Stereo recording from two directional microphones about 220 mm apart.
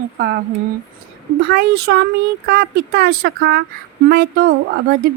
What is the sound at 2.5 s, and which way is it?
Speech, 45° right (ahead or behind).